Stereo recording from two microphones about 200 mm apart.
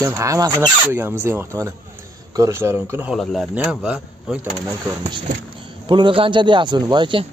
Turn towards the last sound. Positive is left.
turn(degrees=-25)  # may be behind; listen again after turning